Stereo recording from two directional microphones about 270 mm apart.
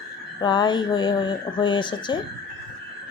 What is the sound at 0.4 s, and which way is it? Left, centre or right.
Speech, centre.